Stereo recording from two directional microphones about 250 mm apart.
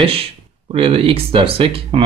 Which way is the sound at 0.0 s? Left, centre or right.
Right.